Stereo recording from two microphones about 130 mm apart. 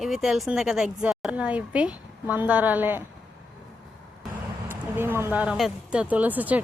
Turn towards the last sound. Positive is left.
turn(degrees=-10)  # may be behind; listen again after turning